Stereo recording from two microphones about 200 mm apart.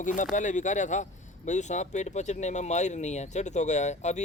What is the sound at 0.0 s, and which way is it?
A man's voice, 40° left (ahead or behind).